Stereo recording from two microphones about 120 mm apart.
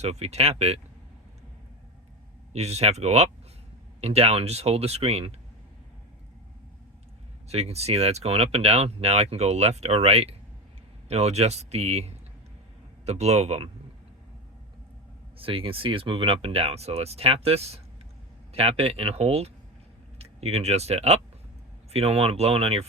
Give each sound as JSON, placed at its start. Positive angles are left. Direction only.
{"t": 0.0, "sound": "speech", "side_deg": -65}
{"t": 2.5, "sound": "speech", "side_deg": -65}
{"t": 7.4, "sound": "speech", "side_deg": -60}
{"t": 15.4, "sound": "speech", "side_deg": -50}